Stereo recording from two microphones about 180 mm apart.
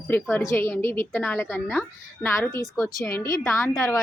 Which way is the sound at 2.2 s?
15° left (ahead or behind).